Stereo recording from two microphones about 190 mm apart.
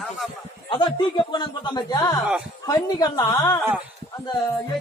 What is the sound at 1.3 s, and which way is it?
Speech, 25° left (ahead or behind).